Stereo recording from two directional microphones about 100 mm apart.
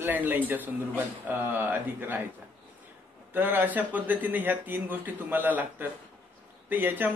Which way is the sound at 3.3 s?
20° right (ahead or behind).